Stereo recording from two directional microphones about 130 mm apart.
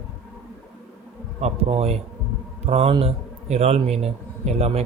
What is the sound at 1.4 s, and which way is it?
A man's voice, 55° right (ahead or behind).